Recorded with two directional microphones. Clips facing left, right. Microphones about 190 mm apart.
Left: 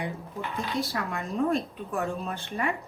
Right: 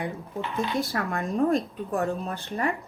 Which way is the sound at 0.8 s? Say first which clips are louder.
Right 3 dB; 50° right (ahead or behind).